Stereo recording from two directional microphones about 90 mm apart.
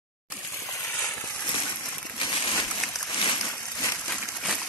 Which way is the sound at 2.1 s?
65° left (ahead or behind).